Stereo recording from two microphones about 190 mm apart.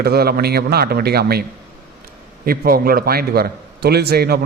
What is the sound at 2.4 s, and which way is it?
A man's voice, 50° right (ahead or behind).